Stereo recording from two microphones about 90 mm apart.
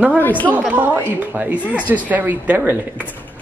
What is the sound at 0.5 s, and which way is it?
A man's voice, 15° right (ahead or behind).